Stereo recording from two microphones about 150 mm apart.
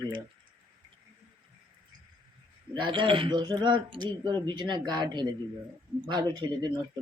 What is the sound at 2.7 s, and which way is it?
Speech, 35° right (ahead or behind).